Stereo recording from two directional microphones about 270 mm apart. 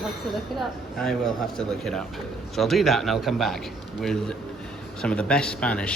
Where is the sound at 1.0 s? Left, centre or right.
Centre.